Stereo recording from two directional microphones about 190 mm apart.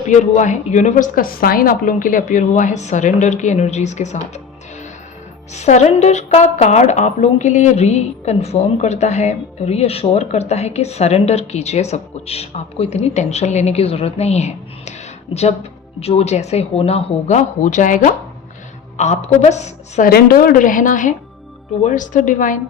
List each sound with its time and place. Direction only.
0.1 s a woman's voice: 40° left (ahead or behind)
5.5 s a woman's voice: 35° left (ahead or behind)
20.1 s a woman's voice: 55° left (ahead or behind)